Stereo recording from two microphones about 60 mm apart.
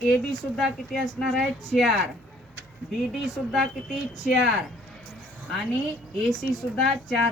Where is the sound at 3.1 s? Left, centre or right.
Centre.